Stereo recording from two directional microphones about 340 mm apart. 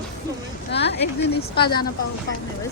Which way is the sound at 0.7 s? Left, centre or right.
Left.